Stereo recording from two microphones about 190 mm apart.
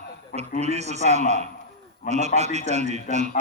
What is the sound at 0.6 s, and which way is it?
A man's voice, 35° right (ahead or behind).